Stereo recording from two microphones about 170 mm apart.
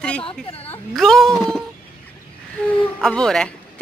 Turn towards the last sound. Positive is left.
turn(degrees=5)  # may be behind; listen again after turning